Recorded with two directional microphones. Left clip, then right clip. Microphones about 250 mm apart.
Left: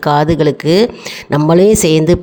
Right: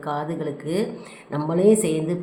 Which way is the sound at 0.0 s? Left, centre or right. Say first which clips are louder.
Left 16 dB; left.